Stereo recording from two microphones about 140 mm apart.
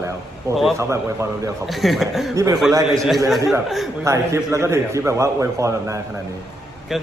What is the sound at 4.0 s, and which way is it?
Speech, 20° right (ahead or behind).